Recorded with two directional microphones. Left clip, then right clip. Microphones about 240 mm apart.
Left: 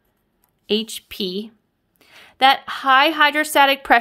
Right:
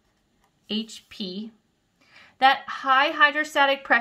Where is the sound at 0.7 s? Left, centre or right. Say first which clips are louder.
Left 10 dB; left.